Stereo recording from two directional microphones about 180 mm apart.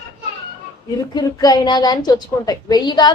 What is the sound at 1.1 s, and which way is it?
A woman's voice, 20° left (ahead or behind).